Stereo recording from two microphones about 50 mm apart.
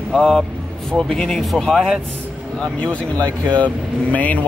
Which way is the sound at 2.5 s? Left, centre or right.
Left.